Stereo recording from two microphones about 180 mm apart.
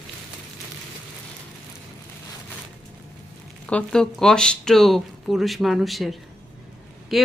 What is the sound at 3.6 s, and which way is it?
Speech, 5° left (ahead or behind).